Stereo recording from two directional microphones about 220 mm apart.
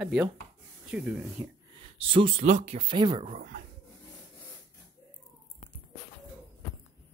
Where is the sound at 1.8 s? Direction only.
25° right (ahead or behind).